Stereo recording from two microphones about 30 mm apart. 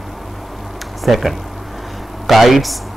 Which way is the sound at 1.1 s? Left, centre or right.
Centre.